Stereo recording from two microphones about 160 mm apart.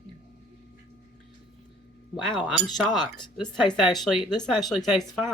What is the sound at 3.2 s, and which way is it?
Speech, 25° left (ahead or behind).